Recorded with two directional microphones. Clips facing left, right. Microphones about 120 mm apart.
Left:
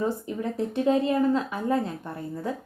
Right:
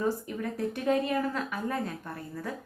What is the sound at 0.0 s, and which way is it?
A woman's voice, 25° left (ahead or behind).